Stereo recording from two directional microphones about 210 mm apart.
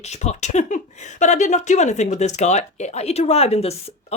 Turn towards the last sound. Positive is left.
turn(degrees=30)  # may be behind; listen again after turning